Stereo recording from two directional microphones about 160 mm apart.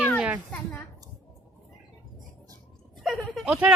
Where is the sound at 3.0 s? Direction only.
Centre (ahead or behind).